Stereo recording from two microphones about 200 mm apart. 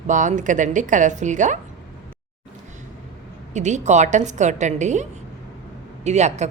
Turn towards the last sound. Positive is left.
turn(degrees=-35)  # may be behind; listen again after turning